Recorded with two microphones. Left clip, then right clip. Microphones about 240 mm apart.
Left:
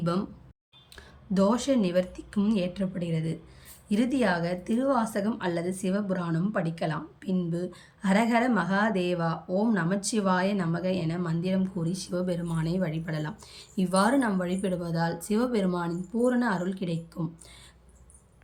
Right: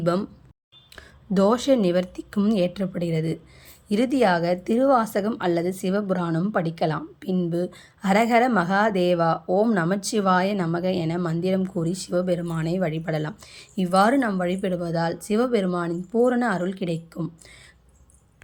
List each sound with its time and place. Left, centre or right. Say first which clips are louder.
0.0 s a woman's voice: right 7 dB; centre